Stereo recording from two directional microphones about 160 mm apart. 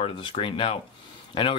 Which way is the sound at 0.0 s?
30° left (ahead or behind).